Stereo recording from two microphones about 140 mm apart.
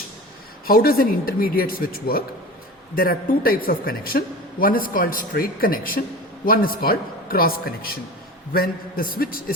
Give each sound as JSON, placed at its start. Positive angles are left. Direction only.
{"t": 0.6, "sound": "speech", "side_deg": 90}